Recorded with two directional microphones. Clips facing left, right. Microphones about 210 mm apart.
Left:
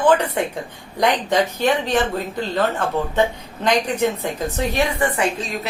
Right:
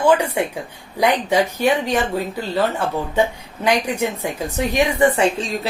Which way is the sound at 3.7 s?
10° right (ahead or behind).